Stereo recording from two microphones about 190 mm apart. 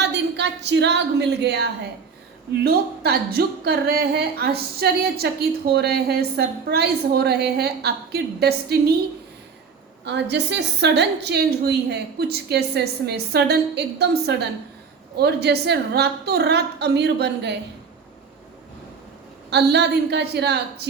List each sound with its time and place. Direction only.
0.0 s a woman's voice: 65° right (ahead or behind)
2.6 s speech: 55° right (ahead or behind)
10.0 s speech: 65° right (ahead or behind)
19.5 s speech: 60° right (ahead or behind)